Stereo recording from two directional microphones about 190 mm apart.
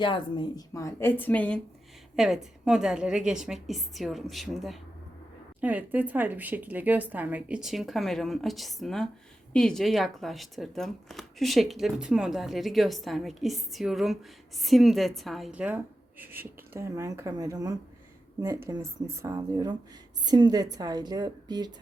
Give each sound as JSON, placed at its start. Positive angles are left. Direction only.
{"t": 0.0, "sound": "a woman's voice", "side_deg": 25}